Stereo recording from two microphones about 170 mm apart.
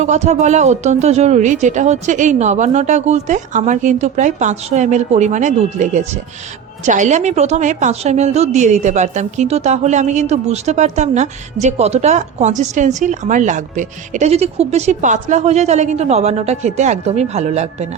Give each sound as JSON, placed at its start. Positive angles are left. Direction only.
{"t": 0.0, "sound": "a woman's voice", "side_deg": -45}